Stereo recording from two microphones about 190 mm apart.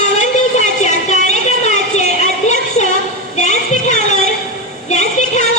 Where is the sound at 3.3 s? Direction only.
40° left (ahead or behind).